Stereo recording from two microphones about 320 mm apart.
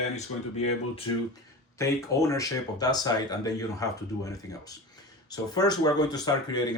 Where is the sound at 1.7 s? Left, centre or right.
Centre.